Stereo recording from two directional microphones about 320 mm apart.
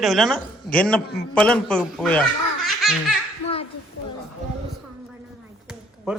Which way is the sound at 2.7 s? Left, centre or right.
Centre.